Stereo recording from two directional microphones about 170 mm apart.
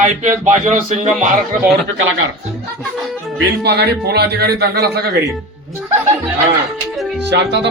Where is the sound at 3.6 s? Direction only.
75° right (ahead or behind).